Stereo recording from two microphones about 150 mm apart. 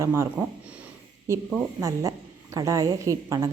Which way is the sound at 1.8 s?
20° right (ahead or behind).